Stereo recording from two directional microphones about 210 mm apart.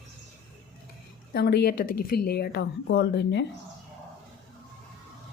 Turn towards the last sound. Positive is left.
turn(degrees=55)  # may be behind; listen again after turning